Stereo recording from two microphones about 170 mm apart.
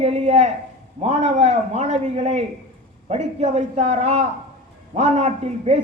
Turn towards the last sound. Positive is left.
turn(degrees=-40)  # may be behind; listen again after turning